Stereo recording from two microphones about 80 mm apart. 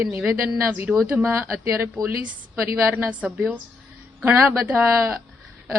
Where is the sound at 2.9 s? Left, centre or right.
Right.